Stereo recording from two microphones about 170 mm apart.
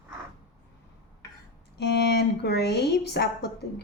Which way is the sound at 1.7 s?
80° left.